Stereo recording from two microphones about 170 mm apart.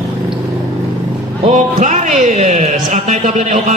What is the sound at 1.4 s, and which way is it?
A man's voice, 45° right (ahead or behind).